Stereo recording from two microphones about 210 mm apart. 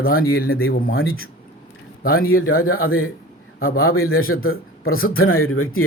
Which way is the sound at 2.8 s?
75° left (ahead or behind).